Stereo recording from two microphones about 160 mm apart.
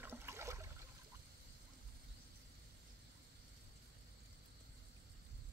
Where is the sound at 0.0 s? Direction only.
15° right (ahead or behind).